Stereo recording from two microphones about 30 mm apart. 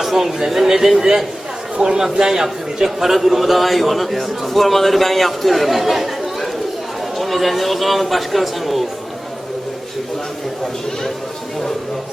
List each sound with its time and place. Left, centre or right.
0.0 s a man's voice: centre
1.7 s speech: right
2.0 s a man's voice: centre
7.2 s a man's voice: centre